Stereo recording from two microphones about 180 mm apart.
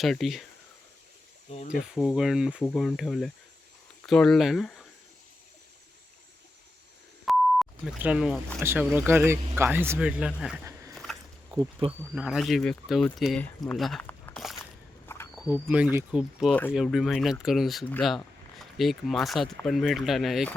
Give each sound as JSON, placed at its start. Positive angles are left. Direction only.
{"t": 0.0, "sound": "speech", "side_deg": 0}
{"t": 1.5, "sound": "speech", "side_deg": 40}
{"t": 1.8, "sound": "speech", "side_deg": 0}
{"t": 7.3, "sound": "beep", "side_deg": 0}
{"t": 8.6, "sound": "speech", "side_deg": -10}
{"t": 10.9, "sound": "dog", "side_deg": 0}
{"t": 11.5, "sound": "speech", "side_deg": -25}
{"t": 12.1, "sound": "speech", "side_deg": -5}
{"t": 13.7, "sound": "a sound", "side_deg": 0}
{"t": 15.4, "sound": "speech", "side_deg": -10}